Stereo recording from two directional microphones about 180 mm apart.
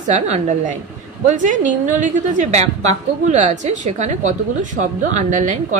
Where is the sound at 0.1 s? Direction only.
40° right (ahead or behind).